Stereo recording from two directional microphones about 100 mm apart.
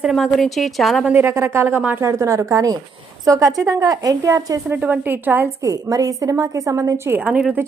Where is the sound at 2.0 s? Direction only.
30° right (ahead or behind).